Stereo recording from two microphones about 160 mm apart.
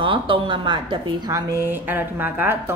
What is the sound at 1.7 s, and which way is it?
Speech, 10° right (ahead or behind).